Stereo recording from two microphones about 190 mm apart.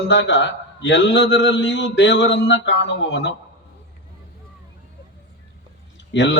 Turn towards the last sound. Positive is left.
turn(degrees=70)  # may be behind; listen again after turning